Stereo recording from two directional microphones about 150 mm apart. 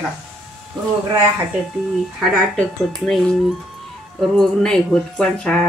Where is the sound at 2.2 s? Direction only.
Centre (ahead or behind).